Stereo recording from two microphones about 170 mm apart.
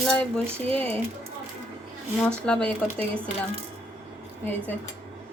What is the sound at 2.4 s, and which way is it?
Speech, 5° left (ahead or behind).